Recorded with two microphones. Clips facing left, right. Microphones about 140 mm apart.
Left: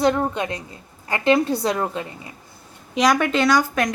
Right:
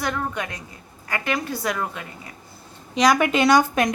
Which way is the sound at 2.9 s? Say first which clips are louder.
Even; centre (ahead or behind).